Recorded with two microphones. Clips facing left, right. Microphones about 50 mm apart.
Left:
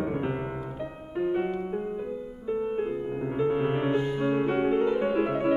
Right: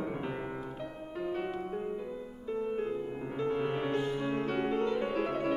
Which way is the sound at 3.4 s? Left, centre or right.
Left.